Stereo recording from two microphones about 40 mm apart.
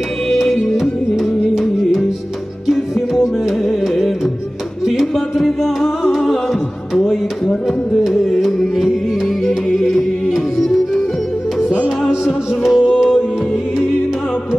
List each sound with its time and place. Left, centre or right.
0.3 s music: centre
0.7 s music: centre
5.1 s music: centre
7.0 s music: centre
8.0 s music: centre
12.3 s music: centre